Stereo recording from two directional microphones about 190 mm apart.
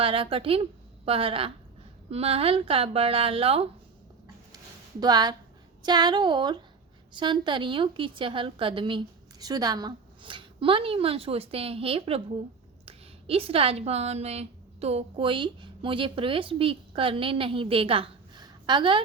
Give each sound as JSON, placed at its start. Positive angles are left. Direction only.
{"t": 0.0, "sound": "a woman's voice", "side_deg": -30}
{"t": 4.5, "sound": "a sound", "side_deg": -20}
{"t": 5.8, "sound": "a woman's voice", "side_deg": -20}